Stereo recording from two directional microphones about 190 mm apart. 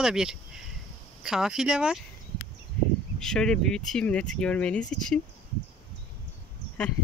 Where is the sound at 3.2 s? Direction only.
5° left (ahead or behind).